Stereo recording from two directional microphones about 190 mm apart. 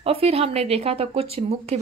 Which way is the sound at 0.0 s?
30° right (ahead or behind).